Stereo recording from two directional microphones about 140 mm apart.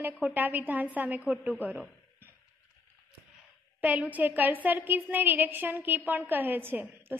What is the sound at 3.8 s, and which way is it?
A woman's voice, 10° right (ahead or behind).